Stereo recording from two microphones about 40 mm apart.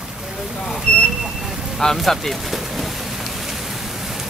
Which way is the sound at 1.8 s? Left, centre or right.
Centre.